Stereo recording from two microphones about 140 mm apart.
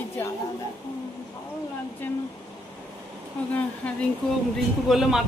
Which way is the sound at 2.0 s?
15° left (ahead or behind).